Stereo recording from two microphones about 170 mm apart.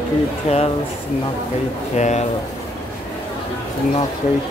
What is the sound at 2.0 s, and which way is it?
Speech, 40° left (ahead or behind).